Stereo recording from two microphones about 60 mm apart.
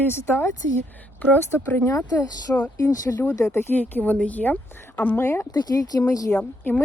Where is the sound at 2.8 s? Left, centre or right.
Left.